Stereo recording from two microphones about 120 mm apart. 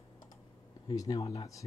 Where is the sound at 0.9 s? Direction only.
30° left (ahead or behind).